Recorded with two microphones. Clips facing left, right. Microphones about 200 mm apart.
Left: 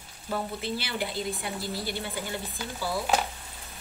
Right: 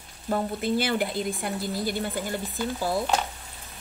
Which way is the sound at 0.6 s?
50° right (ahead or behind).